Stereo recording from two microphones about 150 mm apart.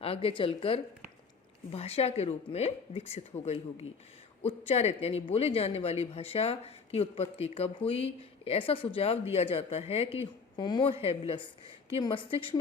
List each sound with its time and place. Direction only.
0.0 s speech: 40° left (ahead or behind)
10.6 s speech: 30° left (ahead or behind)